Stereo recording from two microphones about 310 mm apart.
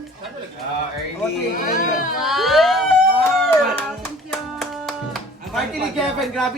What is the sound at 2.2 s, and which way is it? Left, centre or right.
Speech, centre.